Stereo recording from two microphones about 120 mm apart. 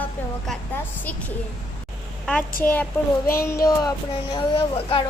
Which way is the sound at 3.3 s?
25° left (ahead or behind).